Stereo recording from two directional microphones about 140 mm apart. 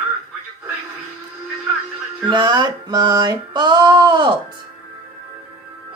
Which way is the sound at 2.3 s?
35° right (ahead or behind).